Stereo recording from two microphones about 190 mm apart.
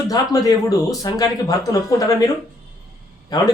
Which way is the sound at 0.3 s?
15° left (ahead or behind).